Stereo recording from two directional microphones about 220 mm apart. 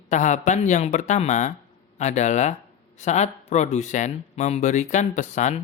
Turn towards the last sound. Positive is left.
turn(degrees=35)  # may be behind; listen again after turning